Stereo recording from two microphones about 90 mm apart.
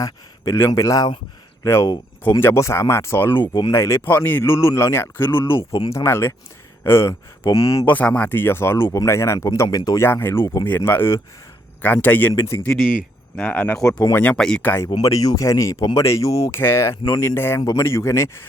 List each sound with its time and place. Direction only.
0.0 s a man's voice: 35° left (ahead or behind)
3.3 s speech: 60° left (ahead or behind)
3.7 s speech: 35° left (ahead or behind)
4.0 s speech: 20° left (ahead or behind); by 7.9 s 35° left (ahead or behind)
7.9 s speech: 15° left (ahead or behind); by 10.0 s 45° left (ahead or behind)
10.0 s speech: 25° left (ahead or behind)
12.3 s speech: 35° left (ahead or behind)
13.3 s speech: 15° left (ahead or behind)
13.8 s speech: 40° left (ahead or behind)
14.3 s speech: 5° left (ahead or behind)
14.6 s speech: 20° left (ahead or behind)
15.0 s speech: 40° left (ahead or behind)